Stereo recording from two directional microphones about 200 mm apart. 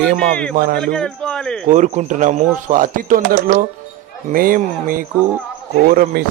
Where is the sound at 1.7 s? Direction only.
35° right (ahead or behind).